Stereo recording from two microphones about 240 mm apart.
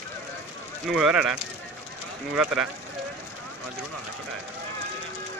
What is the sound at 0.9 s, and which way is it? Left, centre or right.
Speech, centre.